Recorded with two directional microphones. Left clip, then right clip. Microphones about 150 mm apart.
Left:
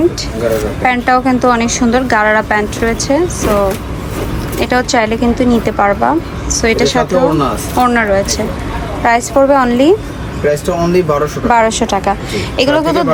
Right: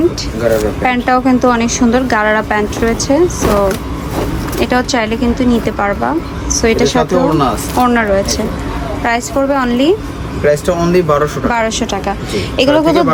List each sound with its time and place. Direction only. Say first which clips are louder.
0.8 s a woman's voice: left 1 dB; 15° right (ahead or behind)
4.6 s speech: left 2 dB; 15° right (ahead or behind)
6.5 s a woman's voice: even; 20° right (ahead or behind)
7.0 s speech: left 1 dB; centre (ahead or behind)
7.8 s speech: left 1 dB; 20° right (ahead or behind)